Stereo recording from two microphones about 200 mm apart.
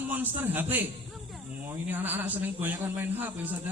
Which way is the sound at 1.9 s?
10° right (ahead or behind).